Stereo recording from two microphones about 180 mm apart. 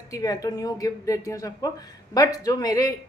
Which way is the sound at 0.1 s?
20° left (ahead or behind).